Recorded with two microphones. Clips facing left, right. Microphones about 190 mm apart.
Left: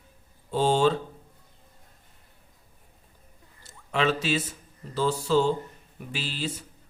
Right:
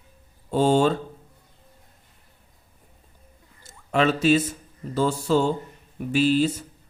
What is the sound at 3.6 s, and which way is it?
Speech, 45° right (ahead or behind).